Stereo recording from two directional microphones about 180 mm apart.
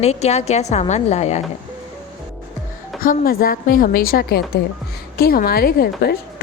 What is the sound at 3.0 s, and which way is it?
A woman's voice, 55° left (ahead or behind).